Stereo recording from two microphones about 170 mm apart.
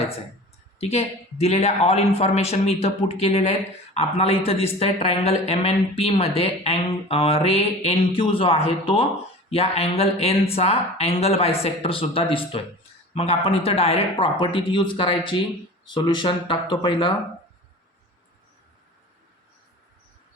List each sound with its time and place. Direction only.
0.8 s a woman's voice: 40° left (ahead or behind)